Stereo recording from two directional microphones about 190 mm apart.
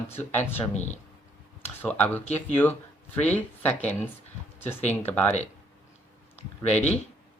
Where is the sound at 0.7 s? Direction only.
35° left (ahead or behind).